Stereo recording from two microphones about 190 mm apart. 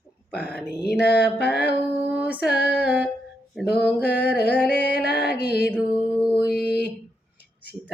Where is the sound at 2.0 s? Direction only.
10° right (ahead or behind).